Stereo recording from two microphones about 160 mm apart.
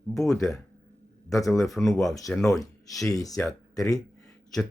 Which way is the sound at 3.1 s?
20° left (ahead or behind).